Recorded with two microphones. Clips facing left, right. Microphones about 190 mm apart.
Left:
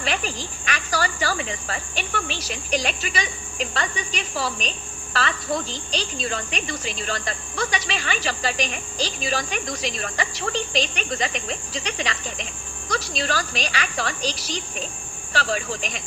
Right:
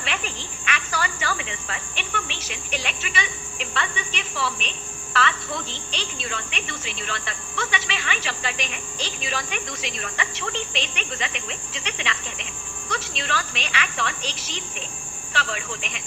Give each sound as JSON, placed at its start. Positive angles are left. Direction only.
{"t": 0.0, "sound": "a woman's voice", "side_deg": 40}